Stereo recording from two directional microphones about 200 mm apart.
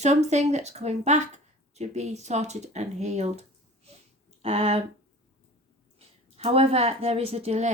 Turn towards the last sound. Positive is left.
turn(degrees=-35)  # may be behind; listen again after turning